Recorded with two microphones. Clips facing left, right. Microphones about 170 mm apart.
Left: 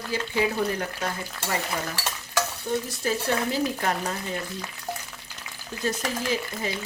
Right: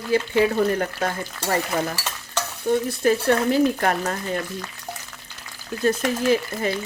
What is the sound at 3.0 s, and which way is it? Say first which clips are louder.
Speech: right 8 dB; 60° right (ahead or behind).